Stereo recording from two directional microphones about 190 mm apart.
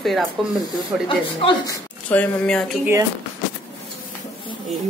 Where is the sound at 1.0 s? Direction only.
25° left (ahead or behind).